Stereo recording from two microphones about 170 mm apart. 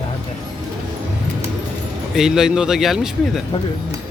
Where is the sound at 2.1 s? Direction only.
5° right (ahead or behind).